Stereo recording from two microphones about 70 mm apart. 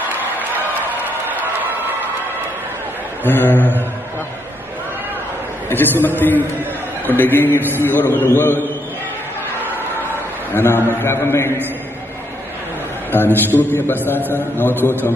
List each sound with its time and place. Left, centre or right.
0.8 s a sound: right
3.3 s a man's voice: left
5.7 s a man's voice: left
10.5 s a man's voice: left
13.1 s a man's voice: left